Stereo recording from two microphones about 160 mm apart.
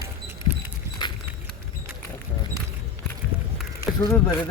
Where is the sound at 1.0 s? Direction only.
30° left (ahead or behind).